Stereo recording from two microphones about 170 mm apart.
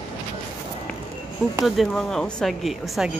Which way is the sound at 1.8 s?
5° left (ahead or behind).